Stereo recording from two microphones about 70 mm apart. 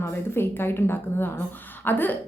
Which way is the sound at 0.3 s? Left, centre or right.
Left.